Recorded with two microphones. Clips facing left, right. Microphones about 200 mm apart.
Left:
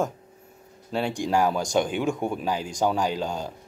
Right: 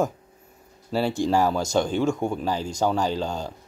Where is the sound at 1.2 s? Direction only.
10° left (ahead or behind).